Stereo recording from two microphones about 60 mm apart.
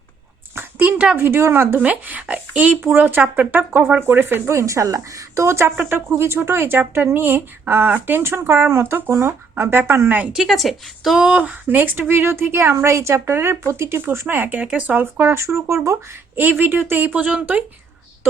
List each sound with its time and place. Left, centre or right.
0.5 s a sound: right
1.1 s speech: right
1.8 s speech: right
2.8 s speech: right
4.5 s a woman's voice: right
10.3 s speech: centre
11.2 s speech: right
15.6 s a woman's voice: right
16.3 s speech: right